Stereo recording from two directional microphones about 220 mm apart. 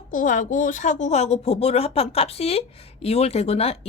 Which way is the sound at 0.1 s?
35° left (ahead or behind).